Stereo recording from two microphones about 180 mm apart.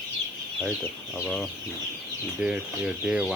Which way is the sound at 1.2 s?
5° left (ahead or behind).